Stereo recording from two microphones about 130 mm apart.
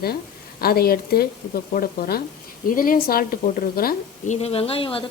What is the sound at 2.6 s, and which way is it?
A woman's voice, 90° left.